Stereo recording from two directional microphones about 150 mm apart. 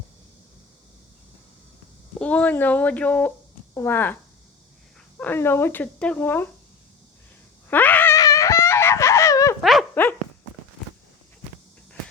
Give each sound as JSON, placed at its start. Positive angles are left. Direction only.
{"t": 2.1, "sound": "speech", "side_deg": 10}
{"t": 7.7, "sound": "a sound", "side_deg": 10}
{"t": 9.9, "sound": "dog", "side_deg": 10}